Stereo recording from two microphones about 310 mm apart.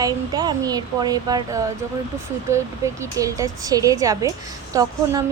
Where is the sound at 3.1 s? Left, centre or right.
Centre.